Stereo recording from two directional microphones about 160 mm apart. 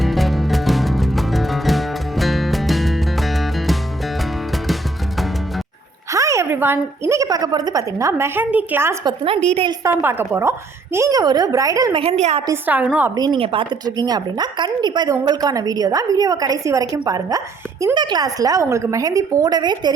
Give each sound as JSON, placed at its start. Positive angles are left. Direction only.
{"t": 0.0, "sound": "music", "side_deg": 0}
{"t": 6.1, "sound": "a woman's voice", "side_deg": -20}
{"t": 9.0, "sound": "a woman's voice", "side_deg": -35}
{"t": 9.6, "sound": "a woman's voice", "side_deg": -15}
{"t": 12.0, "sound": "a woman's voice", "side_deg": -40}
{"t": 12.5, "sound": "a woman's voice", "side_deg": -10}
{"t": 13.1, "sound": "a woman's voice", "side_deg": -30}